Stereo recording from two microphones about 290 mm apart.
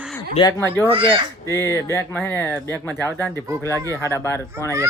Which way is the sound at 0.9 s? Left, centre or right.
Centre.